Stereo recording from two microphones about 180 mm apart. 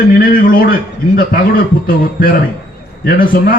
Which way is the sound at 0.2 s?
50° left (ahead or behind).